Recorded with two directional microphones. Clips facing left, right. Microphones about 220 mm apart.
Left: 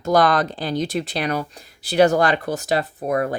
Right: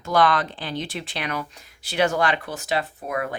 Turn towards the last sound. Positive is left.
turn(degrees=40)  # may be behind; listen again after turning